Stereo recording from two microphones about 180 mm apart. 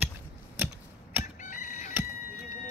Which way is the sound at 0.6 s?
10° right (ahead or behind).